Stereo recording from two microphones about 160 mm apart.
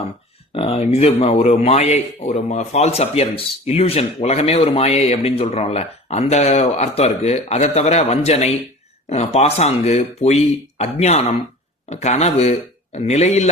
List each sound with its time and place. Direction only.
0.5 s speech: 40° left (ahead or behind)